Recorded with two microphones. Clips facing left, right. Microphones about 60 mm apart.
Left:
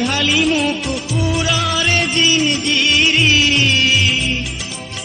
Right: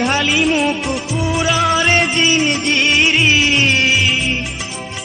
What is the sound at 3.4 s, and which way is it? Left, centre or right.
Music, centre.